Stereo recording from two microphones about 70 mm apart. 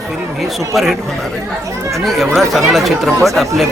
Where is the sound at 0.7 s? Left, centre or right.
Centre.